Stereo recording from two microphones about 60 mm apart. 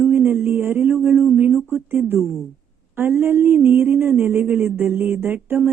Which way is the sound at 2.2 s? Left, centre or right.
Centre.